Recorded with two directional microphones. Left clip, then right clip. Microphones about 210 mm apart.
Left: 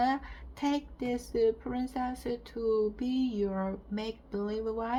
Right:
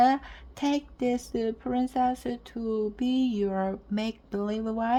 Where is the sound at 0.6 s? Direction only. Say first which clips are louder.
Right 5 dB; 35° right (ahead or behind).